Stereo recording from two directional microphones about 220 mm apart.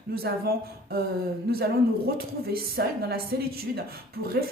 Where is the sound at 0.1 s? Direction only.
45° right (ahead or behind).